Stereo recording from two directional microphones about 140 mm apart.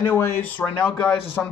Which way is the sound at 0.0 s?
20° left (ahead or behind).